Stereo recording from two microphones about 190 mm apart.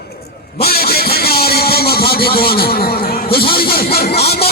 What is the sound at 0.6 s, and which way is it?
Vehicle, 55° left (ahead or behind).